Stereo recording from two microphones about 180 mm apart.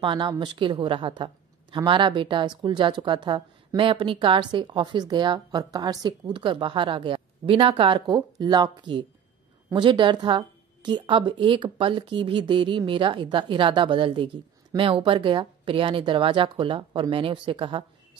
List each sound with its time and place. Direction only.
0.0 s a woman's voice: 25° right (ahead or behind)